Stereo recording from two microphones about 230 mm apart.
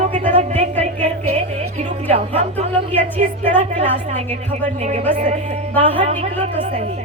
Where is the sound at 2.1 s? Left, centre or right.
Right.